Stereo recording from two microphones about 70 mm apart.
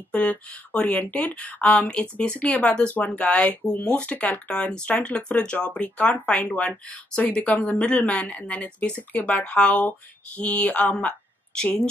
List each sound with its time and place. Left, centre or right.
0.1 s speech: centre